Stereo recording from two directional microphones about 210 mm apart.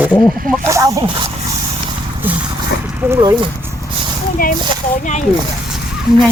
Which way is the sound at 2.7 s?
50° left (ahead or behind).